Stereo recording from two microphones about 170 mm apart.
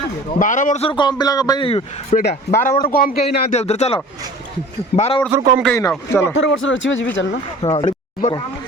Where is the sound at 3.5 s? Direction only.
40° left (ahead or behind).